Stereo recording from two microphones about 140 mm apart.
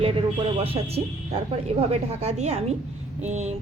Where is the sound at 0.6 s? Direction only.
45° right (ahead or behind).